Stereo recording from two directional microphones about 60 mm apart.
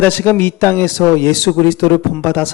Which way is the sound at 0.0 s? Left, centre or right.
Left.